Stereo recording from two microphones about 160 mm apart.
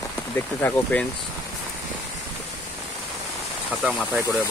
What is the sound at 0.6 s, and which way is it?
Speech, 10° left (ahead or behind).